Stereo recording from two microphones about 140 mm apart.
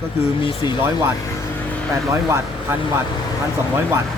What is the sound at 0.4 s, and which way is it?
Speech, 35° left (ahead or behind).